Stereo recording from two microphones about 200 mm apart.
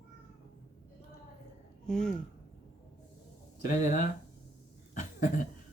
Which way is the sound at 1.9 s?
5° left (ahead or behind).